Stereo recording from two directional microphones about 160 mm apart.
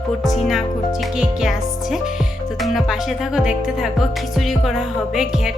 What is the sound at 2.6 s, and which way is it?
Speech, centre (ahead or behind).